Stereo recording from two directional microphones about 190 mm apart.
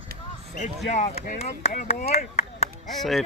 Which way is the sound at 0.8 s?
35° left (ahead or behind).